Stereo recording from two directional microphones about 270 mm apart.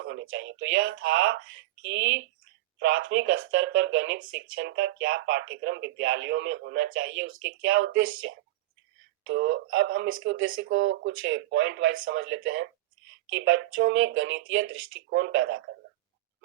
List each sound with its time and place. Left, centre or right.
0.0 s speech: right
9.2 s speech: right